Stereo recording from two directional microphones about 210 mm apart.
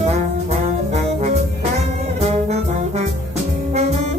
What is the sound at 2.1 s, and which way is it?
Brass instrument, 30° right (ahead or behind).